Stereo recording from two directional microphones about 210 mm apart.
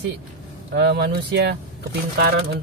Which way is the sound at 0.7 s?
50° right (ahead or behind).